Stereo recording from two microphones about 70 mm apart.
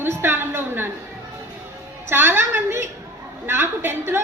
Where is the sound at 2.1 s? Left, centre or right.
Right.